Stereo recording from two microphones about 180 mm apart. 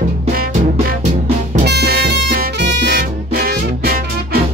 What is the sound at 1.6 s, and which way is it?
Music, 65° right (ahead or behind).